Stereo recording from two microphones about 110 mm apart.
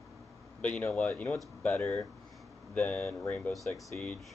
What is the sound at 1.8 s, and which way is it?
Speech, 25° left (ahead or behind).